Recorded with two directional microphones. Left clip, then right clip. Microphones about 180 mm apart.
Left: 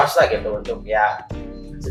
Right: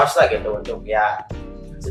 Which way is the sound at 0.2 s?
30° right (ahead or behind).